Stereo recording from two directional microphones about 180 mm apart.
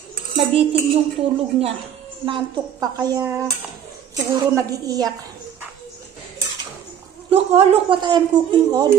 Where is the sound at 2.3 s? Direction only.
20° right (ahead or behind).